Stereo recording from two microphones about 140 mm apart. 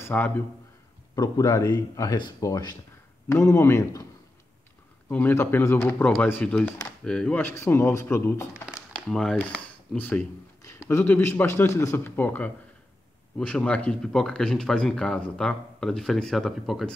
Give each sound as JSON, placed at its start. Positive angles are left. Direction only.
{"t": 0.0, "sound": "a man's voice", "side_deg": 10}
{"t": 1.1, "sound": "speech", "side_deg": 25}
{"t": 8.9, "sound": "speech", "side_deg": 5}
{"t": 9.6, "sound": "a sound", "side_deg": 10}
{"t": 10.6, "sound": "a man's voice", "side_deg": 20}